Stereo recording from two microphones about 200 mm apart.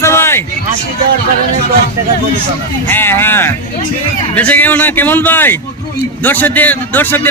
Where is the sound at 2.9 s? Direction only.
10° left (ahead or behind).